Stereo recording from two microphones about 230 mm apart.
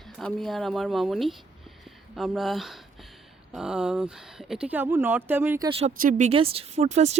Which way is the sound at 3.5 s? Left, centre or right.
Centre.